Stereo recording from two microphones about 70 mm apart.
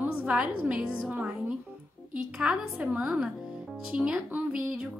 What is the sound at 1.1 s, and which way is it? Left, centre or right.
Music, centre.